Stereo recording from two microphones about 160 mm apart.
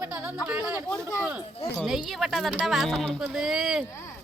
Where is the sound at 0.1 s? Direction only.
10° right (ahead or behind).